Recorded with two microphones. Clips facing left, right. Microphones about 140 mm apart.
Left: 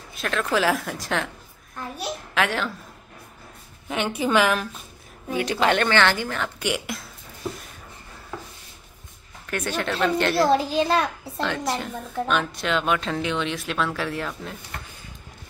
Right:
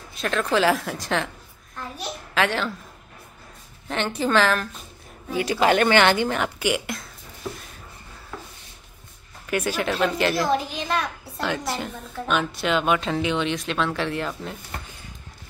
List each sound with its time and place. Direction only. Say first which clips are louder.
0.1 s a child's voice: right 1 dB; centre (ahead or behind)
3.9 s a woman's voice: even; 10° left (ahead or behind)
5.3 s speech: right 2 dB; 5° right (ahead or behind)
5.9 s speech: right 3 dB; 15° right (ahead or behind)
6.6 s speech: right 2 dB; centre (ahead or behind)
9.5 s speech: right 2 dB; 10° right (ahead or behind)
10.5 s a child's voice: left 4 dB; 35° left (ahead or behind)
11.4 s speech: even; centre (ahead or behind)